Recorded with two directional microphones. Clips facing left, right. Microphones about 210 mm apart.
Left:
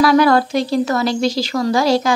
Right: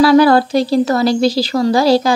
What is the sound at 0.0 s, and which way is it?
Speech, 30° right (ahead or behind).